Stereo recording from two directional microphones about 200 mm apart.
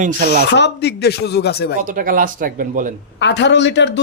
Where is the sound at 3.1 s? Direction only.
60° left (ahead or behind).